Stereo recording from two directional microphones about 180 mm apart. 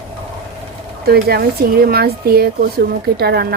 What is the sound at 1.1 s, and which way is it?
Speech, 60° right (ahead or behind).